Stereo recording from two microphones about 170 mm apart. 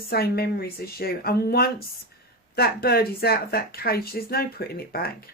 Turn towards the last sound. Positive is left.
turn(degrees=65)  # may be behind; listen again after turning